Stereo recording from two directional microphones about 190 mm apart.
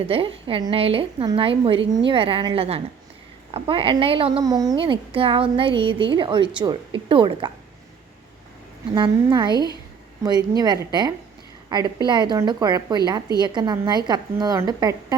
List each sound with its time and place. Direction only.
0.0 s a woman's voice: 30° right (ahead or behind)
9.0 s a woman's voice: 25° right (ahead or behind)
10.6 s a woman's voice: 20° right (ahead or behind)